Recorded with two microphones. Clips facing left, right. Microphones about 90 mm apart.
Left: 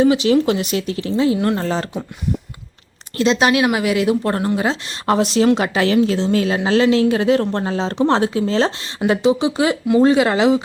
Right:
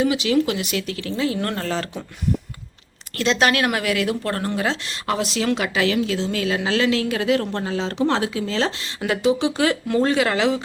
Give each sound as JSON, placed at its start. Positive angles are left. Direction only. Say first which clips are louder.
{"t": 0.0, "sound": "speech", "louder": "left 5 dB", "side_deg": 30}
{"t": 3.2, "sound": "a woman's voice", "louder": "left 4 dB", "side_deg": 15}